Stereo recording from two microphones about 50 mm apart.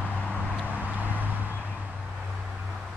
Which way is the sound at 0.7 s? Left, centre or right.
Right.